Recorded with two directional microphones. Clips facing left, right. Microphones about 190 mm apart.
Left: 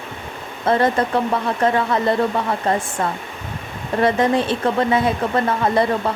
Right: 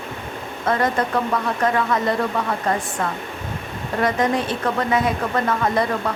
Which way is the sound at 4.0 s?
30° left (ahead or behind).